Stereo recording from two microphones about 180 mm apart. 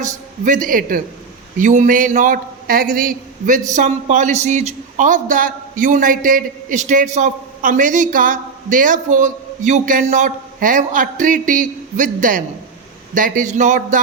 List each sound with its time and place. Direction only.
0.0 s a man's voice: 45° right (ahead or behind)